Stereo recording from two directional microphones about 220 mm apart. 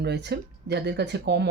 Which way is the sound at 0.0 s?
50° right (ahead or behind).